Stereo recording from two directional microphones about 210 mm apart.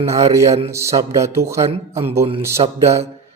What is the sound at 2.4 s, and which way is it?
Speech, 15° right (ahead or behind).